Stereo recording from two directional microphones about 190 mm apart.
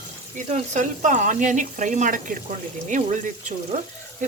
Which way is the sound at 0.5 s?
40° right (ahead or behind).